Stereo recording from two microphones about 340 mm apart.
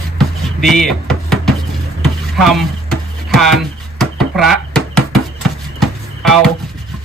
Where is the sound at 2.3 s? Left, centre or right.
Centre.